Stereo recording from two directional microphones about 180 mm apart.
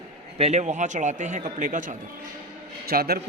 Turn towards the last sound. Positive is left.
turn(degrees=-60)  # may be behind; listen again after turning